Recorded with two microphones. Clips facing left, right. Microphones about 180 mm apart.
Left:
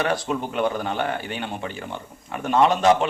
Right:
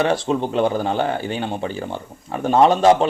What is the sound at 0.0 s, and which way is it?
Speech, 30° right (ahead or behind).